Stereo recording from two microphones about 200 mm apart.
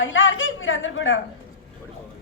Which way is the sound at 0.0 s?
75° left (ahead or behind).